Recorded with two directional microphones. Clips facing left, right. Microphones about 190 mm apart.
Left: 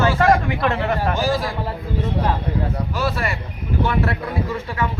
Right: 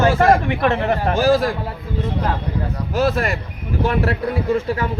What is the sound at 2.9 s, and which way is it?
Speech, 50° right (ahead or behind).